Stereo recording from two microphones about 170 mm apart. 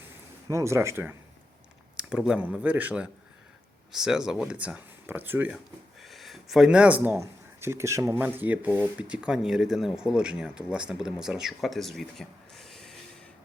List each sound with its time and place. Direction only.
0.4 s speech: 15° right (ahead or behind)
6.0 s speech: centre (ahead or behind)